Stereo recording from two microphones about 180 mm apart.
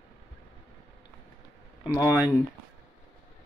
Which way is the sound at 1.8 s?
15° left (ahead or behind).